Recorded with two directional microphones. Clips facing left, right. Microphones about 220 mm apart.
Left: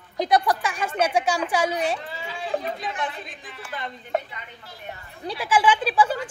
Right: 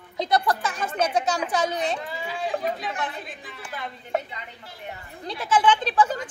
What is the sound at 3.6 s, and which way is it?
Speech, 5° right (ahead or behind).